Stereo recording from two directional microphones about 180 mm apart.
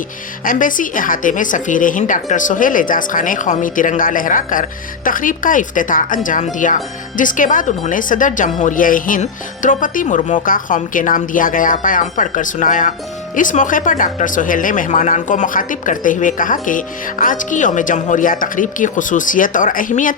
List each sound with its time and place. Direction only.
0.4 s speech: 45° left (ahead or behind)